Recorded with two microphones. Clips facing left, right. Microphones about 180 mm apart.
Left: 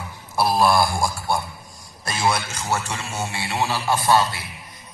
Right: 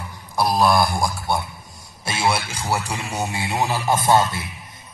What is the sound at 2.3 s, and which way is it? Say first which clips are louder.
Speech: right 1 dB; 30° right (ahead or behind).